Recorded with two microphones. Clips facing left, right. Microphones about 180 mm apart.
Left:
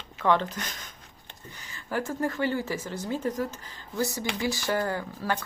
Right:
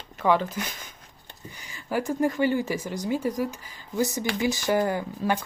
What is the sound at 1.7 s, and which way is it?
Speech, 15° right (ahead or behind).